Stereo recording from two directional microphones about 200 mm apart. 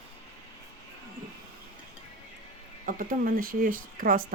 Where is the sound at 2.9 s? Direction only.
45° right (ahead or behind).